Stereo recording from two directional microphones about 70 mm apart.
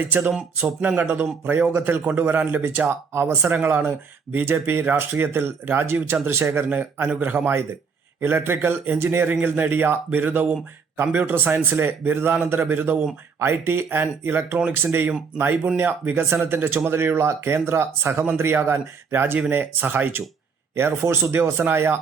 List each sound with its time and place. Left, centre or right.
0.0 s speech: right
1.7 s speech: right
3.1 s speech: right